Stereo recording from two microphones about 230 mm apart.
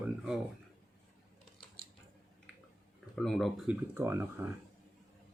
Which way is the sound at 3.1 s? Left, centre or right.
Centre.